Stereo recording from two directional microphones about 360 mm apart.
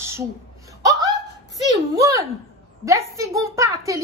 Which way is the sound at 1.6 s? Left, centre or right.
Centre.